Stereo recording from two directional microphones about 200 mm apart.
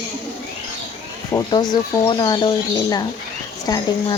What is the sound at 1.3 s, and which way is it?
Speech, 20° left (ahead or behind).